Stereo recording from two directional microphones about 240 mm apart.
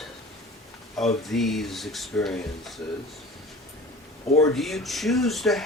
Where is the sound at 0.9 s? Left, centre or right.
Centre.